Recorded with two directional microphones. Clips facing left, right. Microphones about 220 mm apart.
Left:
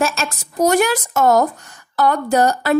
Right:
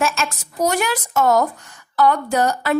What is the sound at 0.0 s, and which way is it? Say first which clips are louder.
Speech: left 2 dB; 35° left (ahead or behind).